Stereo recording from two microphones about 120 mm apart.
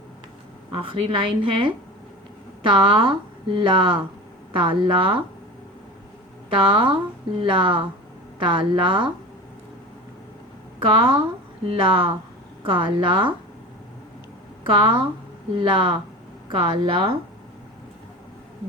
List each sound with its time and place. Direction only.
0.7 s speech: 50° right (ahead or behind)
6.5 s speech: 45° right (ahead or behind)
10.8 s speech: 40° right (ahead or behind)
14.6 s speech: 40° right (ahead or behind)